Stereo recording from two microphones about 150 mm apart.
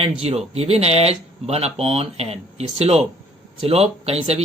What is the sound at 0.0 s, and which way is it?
Speech, 45° right (ahead or behind).